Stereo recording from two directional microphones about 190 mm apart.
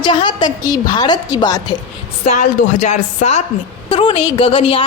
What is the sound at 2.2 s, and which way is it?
A woman's voice, 40° left (ahead or behind).